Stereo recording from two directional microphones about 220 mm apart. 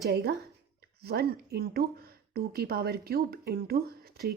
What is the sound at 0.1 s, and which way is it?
A woman's voice, 50° right (ahead or behind).